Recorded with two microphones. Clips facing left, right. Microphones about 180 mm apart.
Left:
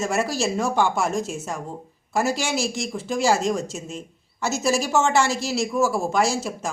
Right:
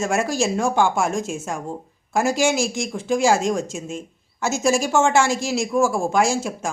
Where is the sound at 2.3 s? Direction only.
50° right (ahead or behind).